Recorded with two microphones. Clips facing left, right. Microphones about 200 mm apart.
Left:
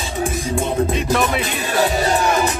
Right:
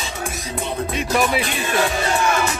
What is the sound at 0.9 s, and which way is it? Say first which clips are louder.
Music: left 1 dB; 5° right (ahead or behind).